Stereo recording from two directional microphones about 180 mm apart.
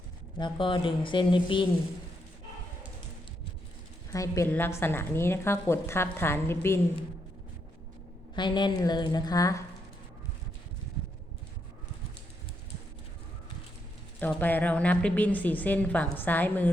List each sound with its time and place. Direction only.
0.3 s a woman's voice: 25° left (ahead or behind)
4.1 s a woman's voice: 15° left (ahead or behind)
8.4 s a woman's voice: 25° left (ahead or behind)
14.2 s a woman's voice: 10° left (ahead or behind)